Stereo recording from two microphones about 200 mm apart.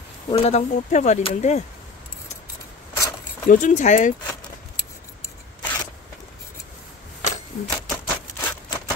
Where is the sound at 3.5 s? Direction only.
40° left (ahead or behind).